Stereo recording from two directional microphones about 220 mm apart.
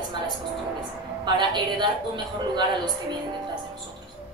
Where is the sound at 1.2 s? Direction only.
20° right (ahead or behind).